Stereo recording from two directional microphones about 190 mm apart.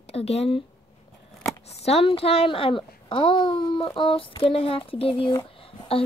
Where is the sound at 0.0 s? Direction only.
35° left (ahead or behind).